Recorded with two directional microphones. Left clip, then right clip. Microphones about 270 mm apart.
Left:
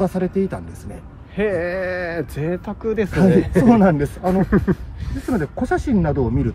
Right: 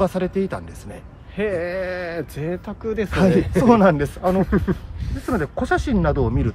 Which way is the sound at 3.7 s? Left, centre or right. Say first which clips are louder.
Right 3 dB; centre.